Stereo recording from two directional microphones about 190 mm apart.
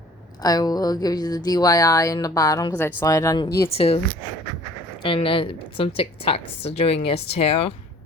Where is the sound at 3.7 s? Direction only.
30° left (ahead or behind).